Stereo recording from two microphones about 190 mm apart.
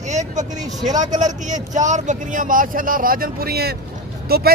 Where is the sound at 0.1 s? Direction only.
40° right (ahead or behind).